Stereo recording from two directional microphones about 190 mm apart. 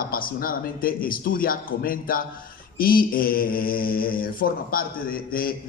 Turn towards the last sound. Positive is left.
turn(degrees=50)  # may be behind; listen again after turning